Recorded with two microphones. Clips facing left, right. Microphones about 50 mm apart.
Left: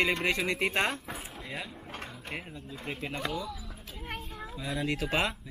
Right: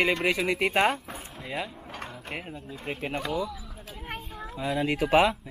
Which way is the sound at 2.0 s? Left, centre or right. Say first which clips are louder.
Right 3 dB; centre.